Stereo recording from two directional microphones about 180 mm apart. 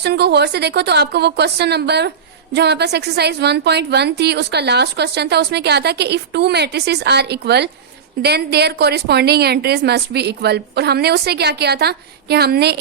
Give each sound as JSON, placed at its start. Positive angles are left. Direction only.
{"t": 0.0, "sound": "a woman's voice", "side_deg": -65}